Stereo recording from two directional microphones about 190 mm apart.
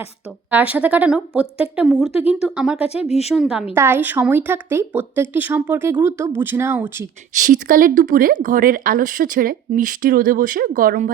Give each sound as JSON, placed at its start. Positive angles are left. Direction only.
{"t": 0.5, "sound": "a woman's voice", "side_deg": -5}
{"t": 2.0, "sound": "speech", "side_deg": 30}
{"t": 2.4, "sound": "speech", "side_deg": -5}
{"t": 3.1, "sound": "speech", "side_deg": 35}
{"t": 3.3, "sound": "a woman's voice", "side_deg": 0}
{"t": 7.3, "sound": "speech", "side_deg": -45}